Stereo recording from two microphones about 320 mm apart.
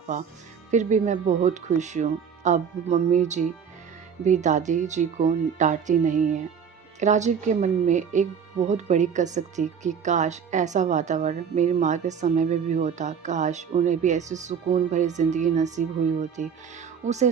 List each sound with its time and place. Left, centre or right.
0.7 s speech: right